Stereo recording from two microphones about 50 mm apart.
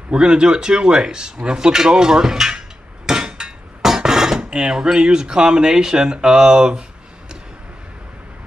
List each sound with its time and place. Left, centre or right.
0.1 s speech: centre